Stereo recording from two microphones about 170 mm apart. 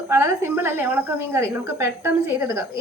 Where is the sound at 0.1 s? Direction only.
15° right (ahead or behind).